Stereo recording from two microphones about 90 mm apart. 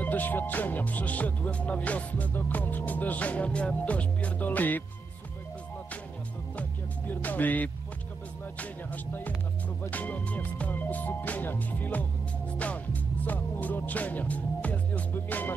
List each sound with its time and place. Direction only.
0.0 s music: 20° left (ahead or behind)
7.1 s speech: 20° left (ahead or behind)
8.5 s music: 20° left (ahead or behind)